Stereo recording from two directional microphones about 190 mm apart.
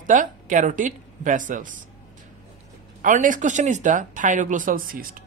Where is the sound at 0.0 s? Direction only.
45° right (ahead or behind).